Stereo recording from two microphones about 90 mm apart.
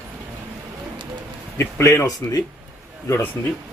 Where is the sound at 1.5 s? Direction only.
30° left (ahead or behind).